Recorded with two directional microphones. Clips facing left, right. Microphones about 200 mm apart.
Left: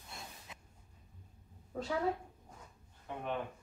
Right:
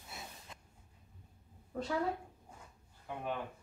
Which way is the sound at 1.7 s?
5° right (ahead or behind).